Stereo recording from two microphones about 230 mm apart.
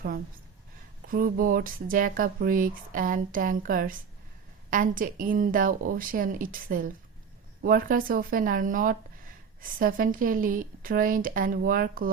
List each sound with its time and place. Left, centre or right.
1.0 s speech: right